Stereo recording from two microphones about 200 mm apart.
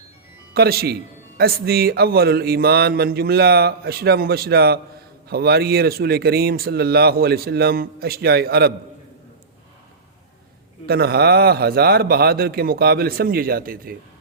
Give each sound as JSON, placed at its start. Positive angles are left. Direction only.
{"t": 0.5, "sound": "speech", "side_deg": -50}
{"t": 10.8, "sound": "speech", "side_deg": -50}